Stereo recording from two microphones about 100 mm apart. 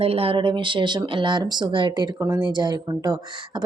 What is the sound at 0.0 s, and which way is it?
Speech, 75° right (ahead or behind).